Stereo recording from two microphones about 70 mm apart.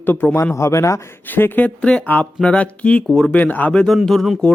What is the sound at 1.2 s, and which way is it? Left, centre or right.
Speech, left.